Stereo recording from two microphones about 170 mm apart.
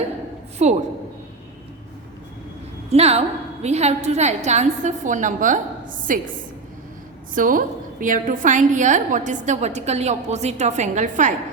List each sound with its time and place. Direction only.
0.6 s a woman's voice: 40° right (ahead or behind)
2.9 s a woman's voice: 40° right (ahead or behind)
7.3 s a woman's voice: 55° right (ahead or behind)